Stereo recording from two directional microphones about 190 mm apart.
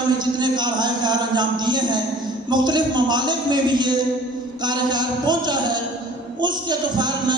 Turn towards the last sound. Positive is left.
turn(degrees=-25)  # may be behind; listen again after turning